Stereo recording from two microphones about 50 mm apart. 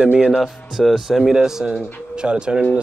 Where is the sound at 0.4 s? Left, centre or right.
Centre.